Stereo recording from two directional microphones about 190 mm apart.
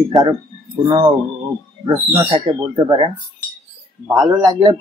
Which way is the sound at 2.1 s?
30° right (ahead or behind).